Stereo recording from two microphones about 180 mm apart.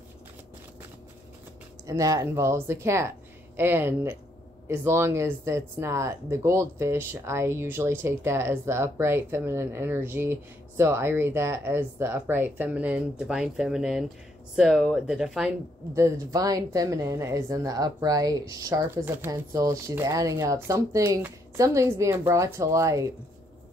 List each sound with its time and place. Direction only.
1.9 s speech: 20° right (ahead or behind)
15.9 s speech: 20° right (ahead or behind)